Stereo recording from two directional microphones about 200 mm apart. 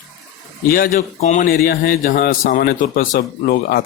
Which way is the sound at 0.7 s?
40° left (ahead or behind).